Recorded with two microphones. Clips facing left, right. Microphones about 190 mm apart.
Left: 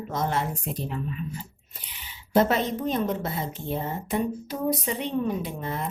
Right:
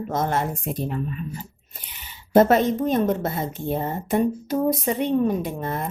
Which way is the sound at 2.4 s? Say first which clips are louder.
Right 6 dB; 50° right (ahead or behind).